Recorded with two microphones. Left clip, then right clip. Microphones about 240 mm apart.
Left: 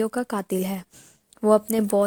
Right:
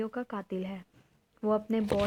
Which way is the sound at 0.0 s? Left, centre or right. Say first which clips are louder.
Left 10 dB; left.